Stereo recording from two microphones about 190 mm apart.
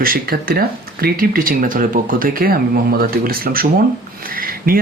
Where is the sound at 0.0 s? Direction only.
50° right (ahead or behind).